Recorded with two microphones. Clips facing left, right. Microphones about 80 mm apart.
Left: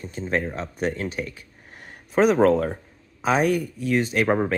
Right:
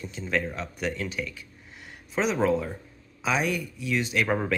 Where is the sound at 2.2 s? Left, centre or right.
Left.